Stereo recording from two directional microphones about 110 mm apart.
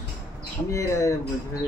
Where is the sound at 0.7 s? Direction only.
30° left (ahead or behind).